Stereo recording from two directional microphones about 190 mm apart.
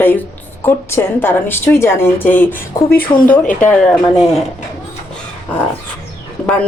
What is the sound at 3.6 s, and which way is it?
Speech, 5° left (ahead or behind).